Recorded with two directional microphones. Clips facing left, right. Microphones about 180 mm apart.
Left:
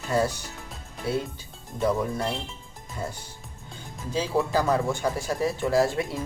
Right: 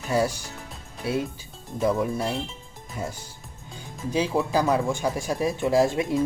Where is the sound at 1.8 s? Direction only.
5° right (ahead or behind).